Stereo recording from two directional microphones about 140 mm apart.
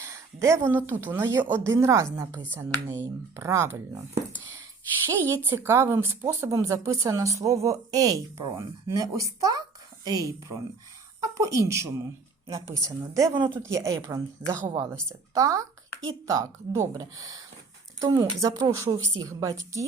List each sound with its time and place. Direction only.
0.0 s a woman's voice: 20° right (ahead or behind)
5.1 s a woman's voice: 20° right (ahead or behind)
14.4 s speech: 10° right (ahead or behind)
15.4 s a woman's voice: 25° right (ahead or behind)